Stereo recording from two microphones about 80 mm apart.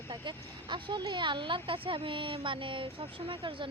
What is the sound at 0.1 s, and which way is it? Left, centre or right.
Speech, right.